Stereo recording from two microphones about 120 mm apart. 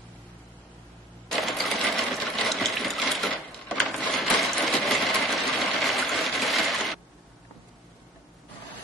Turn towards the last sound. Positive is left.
turn(degrees=0)  # may be behind; listen again after turning